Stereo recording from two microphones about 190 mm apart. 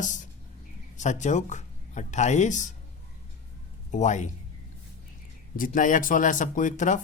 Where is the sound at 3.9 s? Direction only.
40° left (ahead or behind).